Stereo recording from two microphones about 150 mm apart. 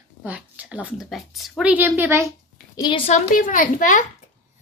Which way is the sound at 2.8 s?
35° left (ahead or behind).